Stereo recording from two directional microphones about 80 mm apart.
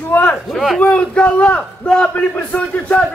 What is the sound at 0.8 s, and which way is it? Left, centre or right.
A man's voice, centre.